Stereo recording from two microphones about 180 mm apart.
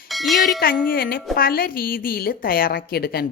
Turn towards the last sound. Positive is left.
turn(degrees=60)  # may be behind; listen again after turning